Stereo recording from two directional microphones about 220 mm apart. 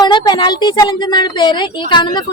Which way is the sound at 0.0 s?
20° left (ahead or behind).